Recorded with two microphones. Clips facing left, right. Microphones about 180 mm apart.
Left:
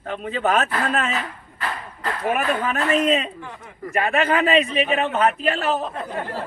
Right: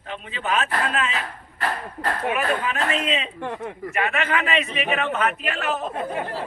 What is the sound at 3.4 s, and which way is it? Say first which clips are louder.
Speech: right 9 dB; 65° right (ahead or behind).